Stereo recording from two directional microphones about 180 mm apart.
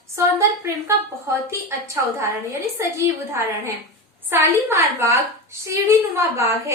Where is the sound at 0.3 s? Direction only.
15° right (ahead or behind).